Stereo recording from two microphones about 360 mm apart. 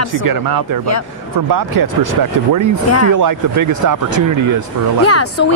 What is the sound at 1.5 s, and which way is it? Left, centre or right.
Speech, right.